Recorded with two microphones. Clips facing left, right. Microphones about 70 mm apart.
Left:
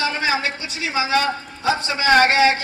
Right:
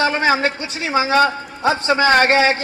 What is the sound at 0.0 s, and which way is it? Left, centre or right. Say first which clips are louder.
A man's voice: right 5 dB; right.